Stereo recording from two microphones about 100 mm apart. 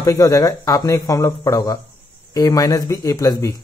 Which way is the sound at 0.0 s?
30° left (ahead or behind).